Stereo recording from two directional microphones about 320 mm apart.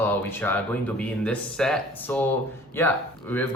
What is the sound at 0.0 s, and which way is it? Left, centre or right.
A man's voice, centre.